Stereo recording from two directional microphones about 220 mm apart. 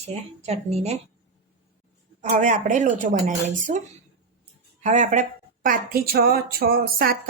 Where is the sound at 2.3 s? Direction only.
35° right (ahead or behind).